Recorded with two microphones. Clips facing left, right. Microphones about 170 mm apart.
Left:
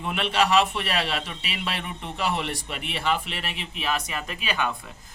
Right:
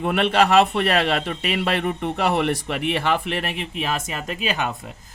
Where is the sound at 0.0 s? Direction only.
55° right (ahead or behind).